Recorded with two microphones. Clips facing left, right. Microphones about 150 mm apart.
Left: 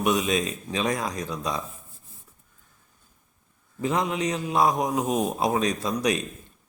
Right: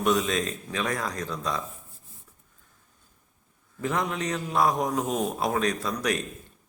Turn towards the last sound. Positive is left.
turn(degrees=15)  # may be behind; listen again after turning